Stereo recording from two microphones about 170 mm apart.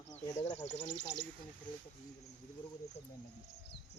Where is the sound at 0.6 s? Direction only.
90° left.